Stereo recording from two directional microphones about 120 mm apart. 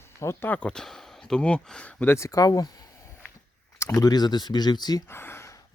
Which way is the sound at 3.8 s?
30° left (ahead or behind).